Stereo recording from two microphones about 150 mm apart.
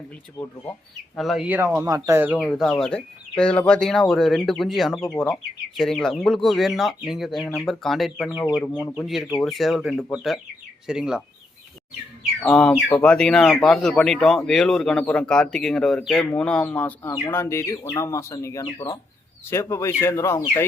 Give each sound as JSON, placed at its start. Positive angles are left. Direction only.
{"t": 0.4, "sound": "speech", "side_deg": 5}
{"t": 1.5, "sound": "speech", "side_deg": -15}
{"t": 2.4, "sound": "speech", "side_deg": 0}
{"t": 12.4, "sound": "speech", "side_deg": 5}